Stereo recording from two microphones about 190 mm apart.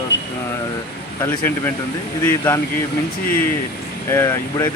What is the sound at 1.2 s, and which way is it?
Speech, 10° left (ahead or behind).